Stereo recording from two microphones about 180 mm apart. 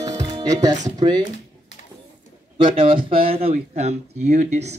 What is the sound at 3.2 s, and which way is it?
Speech, 35° right (ahead or behind).